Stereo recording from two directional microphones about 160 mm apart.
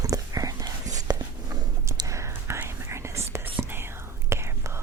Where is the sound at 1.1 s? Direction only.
25° right (ahead or behind).